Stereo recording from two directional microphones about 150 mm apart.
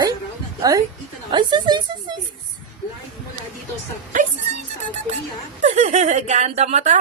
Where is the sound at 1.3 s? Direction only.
30° right (ahead or behind).